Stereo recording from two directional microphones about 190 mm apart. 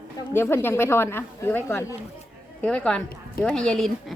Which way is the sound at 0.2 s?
10° left (ahead or behind).